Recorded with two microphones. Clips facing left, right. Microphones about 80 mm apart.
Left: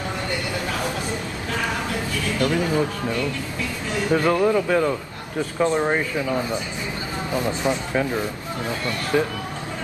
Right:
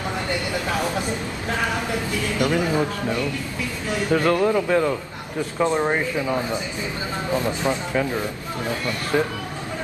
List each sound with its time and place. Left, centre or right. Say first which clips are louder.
2.3 s speech: even; right
4.1 s speech: even; centre
5.6 s speech: even; centre
7.7 s speech: left 1 dB; centre
9.1 s speech: even; centre